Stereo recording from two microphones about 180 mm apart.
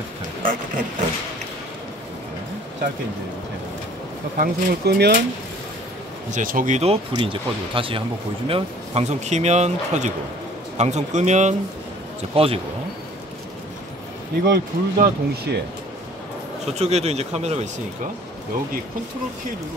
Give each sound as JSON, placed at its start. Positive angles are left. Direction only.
{"t": 0.4, "sound": "vehicle", "side_deg": -50}
{"t": 4.4, "sound": "speech", "side_deg": -65}
{"t": 6.3, "sound": "speech", "side_deg": -50}
{"t": 14.5, "sound": "speech", "side_deg": -60}
{"t": 16.7, "sound": "speech", "side_deg": -35}